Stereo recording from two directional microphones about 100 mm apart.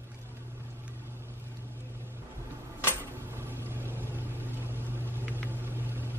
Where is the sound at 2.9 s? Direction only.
20° right (ahead or behind).